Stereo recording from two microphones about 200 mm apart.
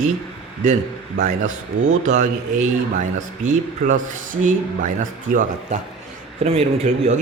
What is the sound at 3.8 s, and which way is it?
Speech, 45° right (ahead or behind).